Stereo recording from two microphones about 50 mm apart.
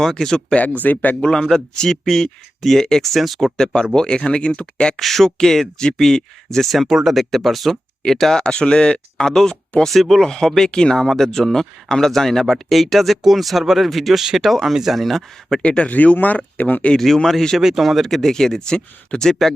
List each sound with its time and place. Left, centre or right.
0.0 s speech: centre
0.5 s speech: left
1.2 s speech: centre
4.9 s speech: centre
6.7 s speech: centre
15.6 s speech: left
16.9 s speech: centre
17.6 s speech: centre